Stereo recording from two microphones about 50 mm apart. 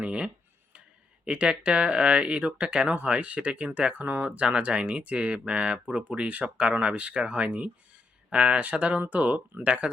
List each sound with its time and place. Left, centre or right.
0.0 s speech: right